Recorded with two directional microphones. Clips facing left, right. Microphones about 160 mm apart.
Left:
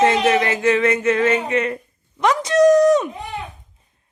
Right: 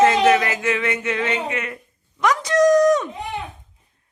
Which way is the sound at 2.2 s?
25° left (ahead or behind).